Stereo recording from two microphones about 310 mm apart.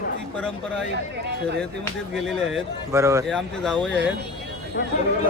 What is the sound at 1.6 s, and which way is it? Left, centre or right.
Speech, centre.